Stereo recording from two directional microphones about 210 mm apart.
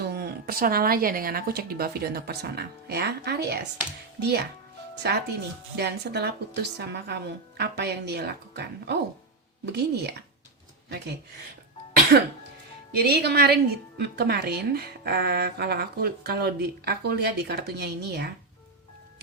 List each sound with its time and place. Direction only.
0.0 s speech: 50° right (ahead or behind)